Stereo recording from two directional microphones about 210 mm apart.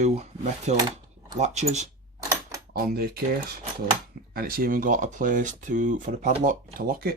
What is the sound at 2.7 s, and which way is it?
Speech, 45° right (ahead or behind).